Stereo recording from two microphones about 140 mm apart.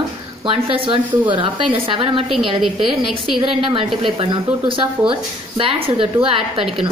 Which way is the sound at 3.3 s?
40° right (ahead or behind).